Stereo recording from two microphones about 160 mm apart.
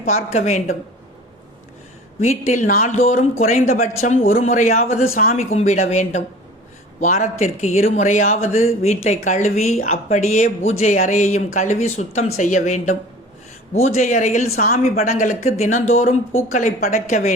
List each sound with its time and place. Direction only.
0.1 s speech: 45° left (ahead or behind)
2.2 s speech: 50° left (ahead or behind)
14.5 s a woman's voice: 70° left (ahead or behind)
14.8 s speech: 45° left (ahead or behind)